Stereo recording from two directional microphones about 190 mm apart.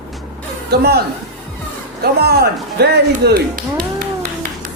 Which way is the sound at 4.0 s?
50° right (ahead or behind).